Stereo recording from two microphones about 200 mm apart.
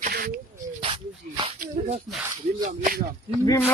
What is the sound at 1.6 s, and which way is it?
Speech, 35° right (ahead or behind).